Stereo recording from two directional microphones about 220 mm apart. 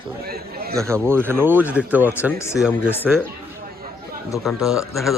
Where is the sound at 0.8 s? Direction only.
10° right (ahead or behind).